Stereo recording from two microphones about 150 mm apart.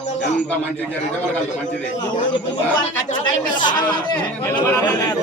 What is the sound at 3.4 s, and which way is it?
Speech, 30° left (ahead or behind).